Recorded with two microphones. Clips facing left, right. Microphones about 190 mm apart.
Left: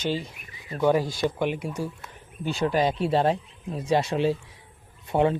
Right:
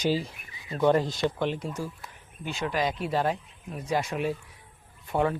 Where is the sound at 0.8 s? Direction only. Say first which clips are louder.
Left 1 dB; 5° left (ahead or behind).